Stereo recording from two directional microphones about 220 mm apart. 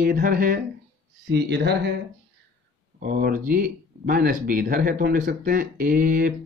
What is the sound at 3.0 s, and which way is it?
Speech, 40° right (ahead or behind).